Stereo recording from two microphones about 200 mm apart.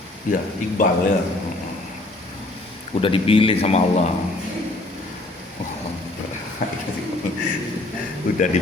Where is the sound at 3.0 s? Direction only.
25° left (ahead or behind).